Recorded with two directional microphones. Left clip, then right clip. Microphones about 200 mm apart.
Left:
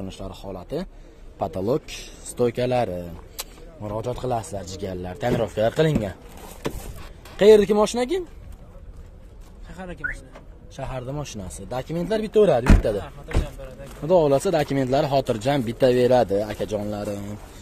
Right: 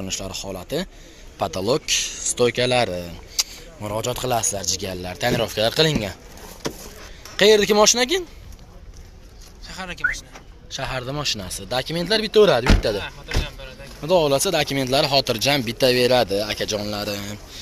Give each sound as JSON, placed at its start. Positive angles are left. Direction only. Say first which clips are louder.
{"t": 0.0, "sound": "speech", "louder": "right 6 dB", "side_deg": -5}
{"t": 1.5, "sound": "speech", "louder": "right 5 dB", "side_deg": 15}
{"t": 4.6, "sound": "speech", "louder": "right 5 dB", "side_deg": 10}
{"t": 7.3, "sound": "speech", "louder": "even", "side_deg": 10}
{"t": 9.8, "sound": "speech", "louder": "right 5 dB", "side_deg": 30}
{"t": 10.8, "sound": "speech", "louder": "right 5 dB", "side_deg": 0}
{"t": 14.0, "sound": "speech", "louder": "even", "side_deg": 30}